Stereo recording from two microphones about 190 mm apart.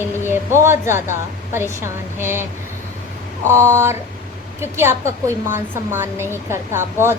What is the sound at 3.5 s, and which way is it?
A woman's voice, 15° right (ahead or behind).